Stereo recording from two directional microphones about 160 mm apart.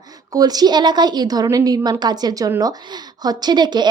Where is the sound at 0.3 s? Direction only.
25° right (ahead or behind).